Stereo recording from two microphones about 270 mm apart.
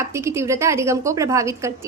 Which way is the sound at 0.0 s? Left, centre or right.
Centre.